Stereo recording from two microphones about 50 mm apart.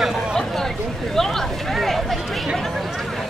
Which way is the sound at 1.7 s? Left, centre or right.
Centre.